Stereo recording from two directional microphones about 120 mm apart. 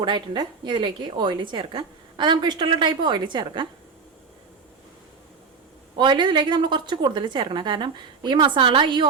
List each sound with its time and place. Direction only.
0.0 s a woman's voice: 40° right (ahead or behind)
6.0 s a woman's voice: 40° right (ahead or behind)